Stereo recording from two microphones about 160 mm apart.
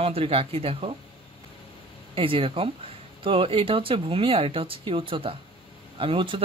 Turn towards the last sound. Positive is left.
turn(degrees=-30)  # may be behind; listen again after turning